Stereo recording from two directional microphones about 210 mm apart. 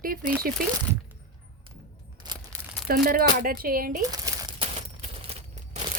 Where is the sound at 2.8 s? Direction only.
45° right (ahead or behind).